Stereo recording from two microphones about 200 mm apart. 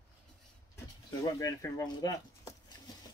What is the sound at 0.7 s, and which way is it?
Speech, 15° left (ahead or behind).